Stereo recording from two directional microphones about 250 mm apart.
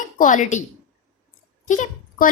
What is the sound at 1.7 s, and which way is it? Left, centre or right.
Speech, left.